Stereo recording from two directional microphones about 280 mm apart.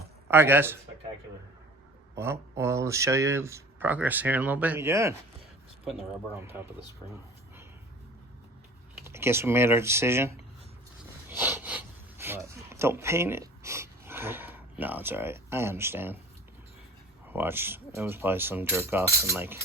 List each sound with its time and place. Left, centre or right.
0.3 s speech: centre
2.1 s speech: centre
9.0 s speech: centre
11.3 s a sound: centre
17.2 s speech: centre